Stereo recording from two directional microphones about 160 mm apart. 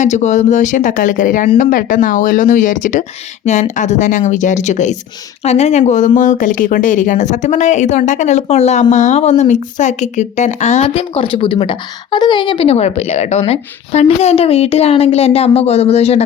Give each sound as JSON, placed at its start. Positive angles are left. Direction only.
{"t": 0.0, "sound": "a woman's voice", "side_deg": 45}